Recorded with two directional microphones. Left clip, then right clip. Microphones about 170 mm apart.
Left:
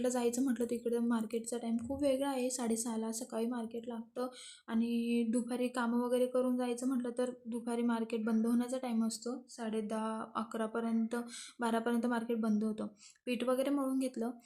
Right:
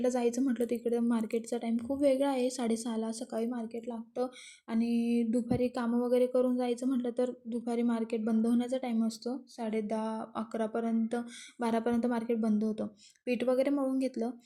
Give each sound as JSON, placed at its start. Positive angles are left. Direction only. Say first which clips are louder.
{"t": 0.0, "sound": "a woman's voice", "louder": "right 4 dB", "side_deg": -15}